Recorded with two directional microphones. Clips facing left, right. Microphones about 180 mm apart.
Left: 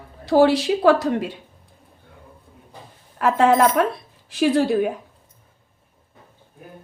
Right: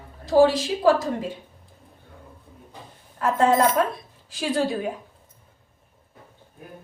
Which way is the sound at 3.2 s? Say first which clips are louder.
Left 3 dB; 70° left (ahead or behind).